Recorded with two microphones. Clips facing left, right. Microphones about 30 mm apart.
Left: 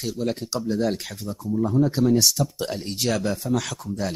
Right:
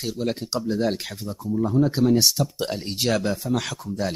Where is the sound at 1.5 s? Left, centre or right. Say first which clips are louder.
Even; centre.